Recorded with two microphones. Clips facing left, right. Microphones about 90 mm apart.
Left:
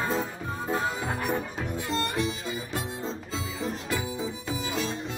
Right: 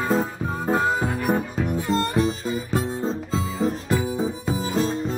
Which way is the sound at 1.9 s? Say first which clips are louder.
Right 6 dB; 35° right (ahead or behind).